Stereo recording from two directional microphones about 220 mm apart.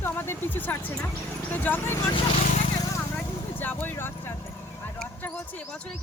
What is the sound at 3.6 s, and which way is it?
Vehicle, 10° left (ahead or behind).